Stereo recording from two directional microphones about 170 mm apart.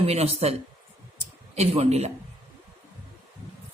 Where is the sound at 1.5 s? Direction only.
40° right (ahead or behind).